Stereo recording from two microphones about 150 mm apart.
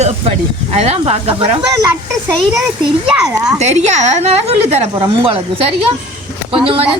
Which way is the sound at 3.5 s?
50° right (ahead or behind).